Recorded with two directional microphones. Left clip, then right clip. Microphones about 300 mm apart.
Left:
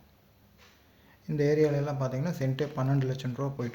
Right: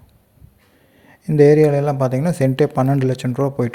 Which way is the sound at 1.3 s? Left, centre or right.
Right.